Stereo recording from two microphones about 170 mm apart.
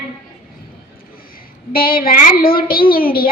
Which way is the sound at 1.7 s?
60° left (ahead or behind).